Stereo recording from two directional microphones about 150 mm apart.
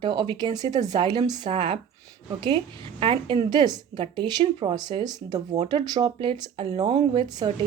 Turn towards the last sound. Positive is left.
turn(degrees=-30)  # may be behind; listen again after turning